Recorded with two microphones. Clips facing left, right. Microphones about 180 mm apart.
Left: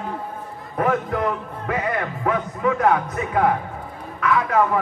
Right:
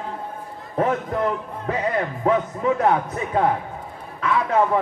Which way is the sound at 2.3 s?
30° right (ahead or behind).